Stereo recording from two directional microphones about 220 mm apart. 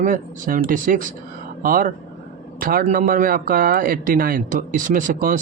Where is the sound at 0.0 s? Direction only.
35° right (ahead or behind).